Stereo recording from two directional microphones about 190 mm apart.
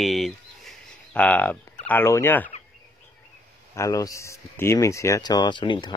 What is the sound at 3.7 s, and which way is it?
Speech, 15° left (ahead or behind).